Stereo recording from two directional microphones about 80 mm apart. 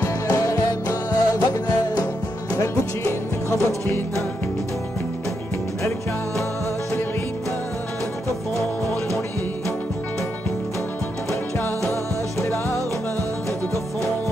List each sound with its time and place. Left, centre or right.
0.0 s music: left
2.5 s music: left
11.9 s music: left